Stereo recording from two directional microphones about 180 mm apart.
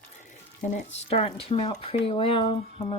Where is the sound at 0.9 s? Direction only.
35° left (ahead or behind).